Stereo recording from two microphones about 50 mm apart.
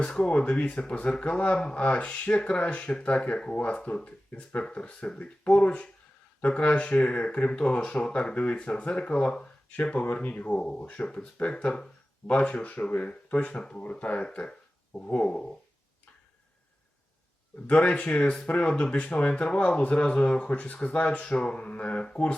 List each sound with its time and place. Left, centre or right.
0.0 s speech: left
17.7 s speech: left